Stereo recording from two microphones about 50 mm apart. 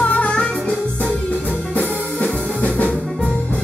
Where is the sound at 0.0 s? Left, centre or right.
Left.